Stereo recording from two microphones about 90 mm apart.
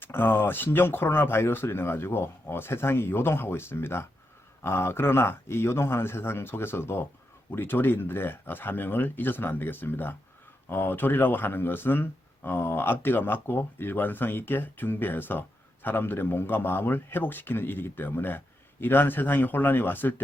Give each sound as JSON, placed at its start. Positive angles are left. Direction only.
{"t": 0.0, "sound": "speech", "side_deg": 25}